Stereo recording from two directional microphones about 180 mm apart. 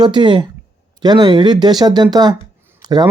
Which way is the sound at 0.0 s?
25° right (ahead or behind).